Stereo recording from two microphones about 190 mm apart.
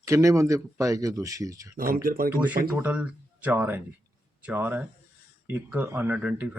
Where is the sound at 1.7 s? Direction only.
50° right (ahead or behind).